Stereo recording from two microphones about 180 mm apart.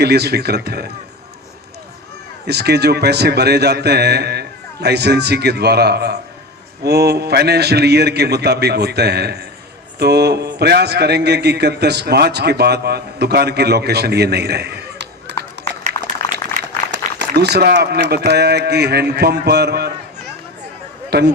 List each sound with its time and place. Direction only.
0.0 s a man's voice: 65° right (ahead or behind)
2.5 s a man's voice: 65° right (ahead or behind)
15.6 s a sound: 70° right (ahead or behind)
16.9 s a man's voice: 70° right (ahead or behind)
21.1 s speech: 65° right (ahead or behind)